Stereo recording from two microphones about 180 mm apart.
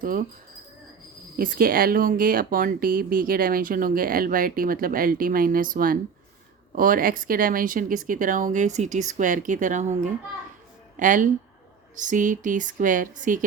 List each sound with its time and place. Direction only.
0.0 s speech: 50° right (ahead or behind)
1.4 s speech: 55° right (ahead or behind)